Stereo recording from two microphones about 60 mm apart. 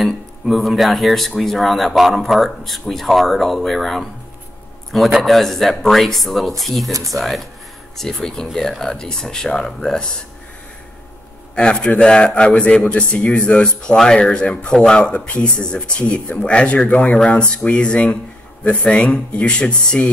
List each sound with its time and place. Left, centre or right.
0.0 s speech: centre
5.2 s a man's voice: centre
11.5 s a man's voice: centre